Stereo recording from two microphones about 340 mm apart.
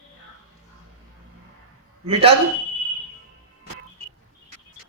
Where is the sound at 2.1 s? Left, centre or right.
Centre.